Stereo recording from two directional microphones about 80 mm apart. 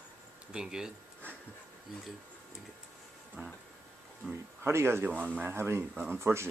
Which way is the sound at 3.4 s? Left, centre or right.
Right.